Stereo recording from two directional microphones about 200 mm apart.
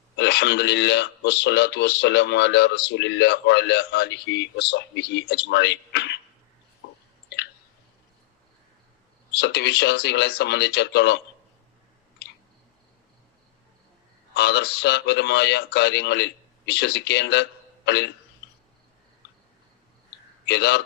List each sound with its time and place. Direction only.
0.2 s a man's voice: 55° left (ahead or behind)
9.4 s a man's voice: 55° left (ahead or behind)
14.3 s a man's voice: 60° left (ahead or behind)
20.4 s a man's voice: 60° left (ahead or behind)